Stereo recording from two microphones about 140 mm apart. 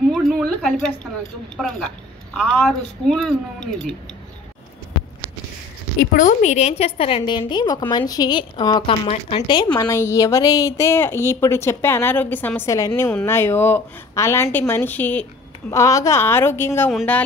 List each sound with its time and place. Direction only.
0.1 s a sound: centre (ahead or behind)
1.6 s speech: centre (ahead or behind)
5.9 s a woman's voice: 65° left (ahead or behind); by 9.7 s 30° left (ahead or behind)
9.8 s a woman's voice: 20° left (ahead or behind)
15.7 s speech: 20° left (ahead or behind)